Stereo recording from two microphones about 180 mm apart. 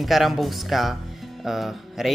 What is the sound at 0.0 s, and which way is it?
Speech, centre (ahead or behind).